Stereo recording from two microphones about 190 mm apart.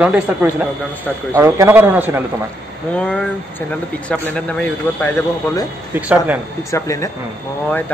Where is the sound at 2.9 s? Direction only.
5° left (ahead or behind).